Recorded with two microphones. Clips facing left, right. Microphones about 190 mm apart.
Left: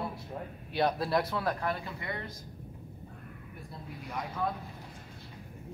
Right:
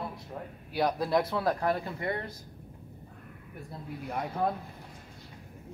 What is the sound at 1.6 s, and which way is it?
Speech, 45° right (ahead or behind).